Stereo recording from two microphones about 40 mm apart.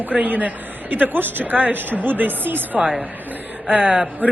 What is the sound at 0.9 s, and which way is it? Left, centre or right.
A woman's voice, right.